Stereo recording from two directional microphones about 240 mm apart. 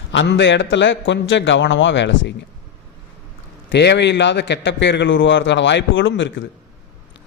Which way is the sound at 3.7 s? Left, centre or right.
Left.